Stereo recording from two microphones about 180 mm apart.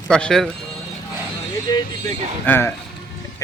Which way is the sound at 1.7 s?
20° left (ahead or behind).